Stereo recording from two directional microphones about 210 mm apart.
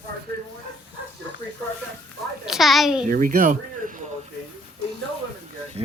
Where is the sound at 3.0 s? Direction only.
40° right (ahead or behind).